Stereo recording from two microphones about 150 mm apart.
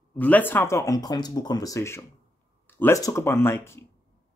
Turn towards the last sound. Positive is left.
turn(degrees=15)  # may be behind; listen again after turning